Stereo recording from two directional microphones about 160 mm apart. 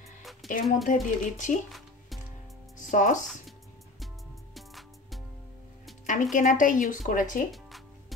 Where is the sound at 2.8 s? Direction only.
50° left (ahead or behind).